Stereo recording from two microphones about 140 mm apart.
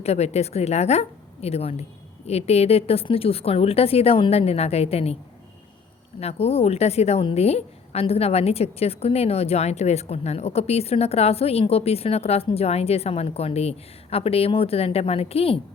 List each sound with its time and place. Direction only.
0.0 s a woman's voice: 50° left (ahead or behind)
6.1 s a woman's voice: 50° left (ahead or behind)